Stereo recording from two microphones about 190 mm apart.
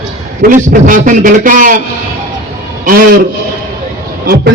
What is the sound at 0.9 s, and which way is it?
Speech, 45° right (ahead or behind).